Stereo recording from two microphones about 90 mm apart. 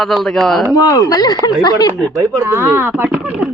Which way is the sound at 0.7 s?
45° left (ahead or behind).